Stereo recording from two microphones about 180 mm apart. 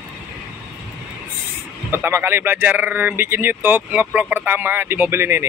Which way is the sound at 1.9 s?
15° right (ahead or behind).